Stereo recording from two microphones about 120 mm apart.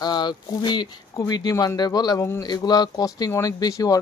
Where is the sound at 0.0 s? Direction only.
35° left (ahead or behind).